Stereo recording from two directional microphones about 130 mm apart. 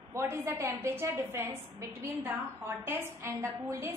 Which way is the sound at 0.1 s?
20° right (ahead or behind).